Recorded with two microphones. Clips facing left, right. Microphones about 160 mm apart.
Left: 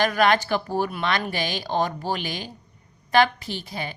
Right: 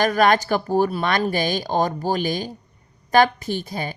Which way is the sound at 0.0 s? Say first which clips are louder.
Right 3 dB; 45° right (ahead or behind).